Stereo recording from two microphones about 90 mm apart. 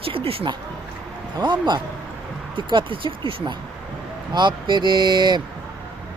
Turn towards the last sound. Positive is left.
turn(degrees=-55)  # may be behind; listen again after turning